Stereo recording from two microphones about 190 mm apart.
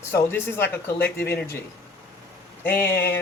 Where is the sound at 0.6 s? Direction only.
55° left (ahead or behind).